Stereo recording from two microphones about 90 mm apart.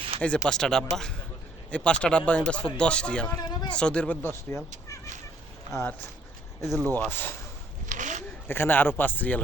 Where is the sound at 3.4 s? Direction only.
50° left (ahead or behind).